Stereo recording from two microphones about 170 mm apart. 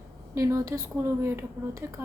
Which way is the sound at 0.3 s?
15° right (ahead or behind).